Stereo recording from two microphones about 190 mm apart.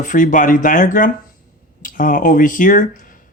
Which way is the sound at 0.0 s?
45° left (ahead or behind).